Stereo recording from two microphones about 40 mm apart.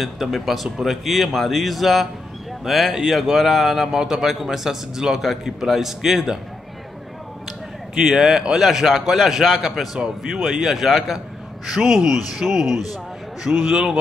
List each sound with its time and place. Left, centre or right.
0.0 s a man's voice: centre
7.9 s a man's voice: centre
13.4 s a man's voice: centre